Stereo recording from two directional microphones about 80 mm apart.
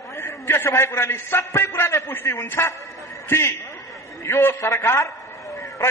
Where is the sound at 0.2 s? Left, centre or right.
Left.